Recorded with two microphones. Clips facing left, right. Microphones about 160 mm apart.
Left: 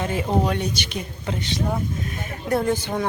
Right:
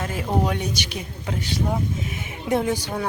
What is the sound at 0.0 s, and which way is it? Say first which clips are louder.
Speech: left 2 dB; 5° right (ahead or behind).